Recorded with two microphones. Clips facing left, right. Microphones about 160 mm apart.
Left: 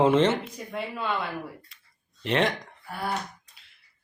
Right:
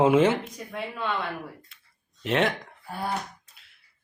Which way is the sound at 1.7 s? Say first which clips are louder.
Even; centre (ahead or behind).